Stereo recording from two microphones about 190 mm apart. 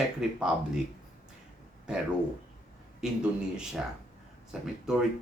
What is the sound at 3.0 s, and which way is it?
Speech, 5° right (ahead or behind).